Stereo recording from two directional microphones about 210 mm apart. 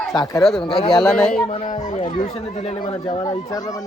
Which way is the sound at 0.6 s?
25° left (ahead or behind).